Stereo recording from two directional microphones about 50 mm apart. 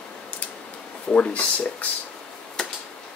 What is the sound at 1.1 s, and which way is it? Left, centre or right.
Speech, left.